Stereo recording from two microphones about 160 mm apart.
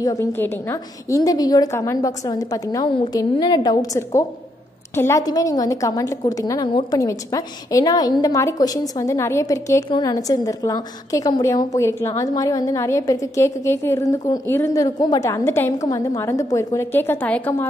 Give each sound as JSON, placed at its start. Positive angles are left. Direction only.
{"t": 0.0, "sound": "a woman's voice", "side_deg": 20}